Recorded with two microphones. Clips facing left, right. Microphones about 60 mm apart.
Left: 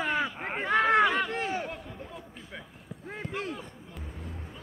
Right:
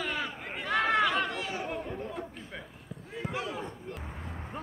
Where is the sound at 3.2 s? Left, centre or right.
Centre.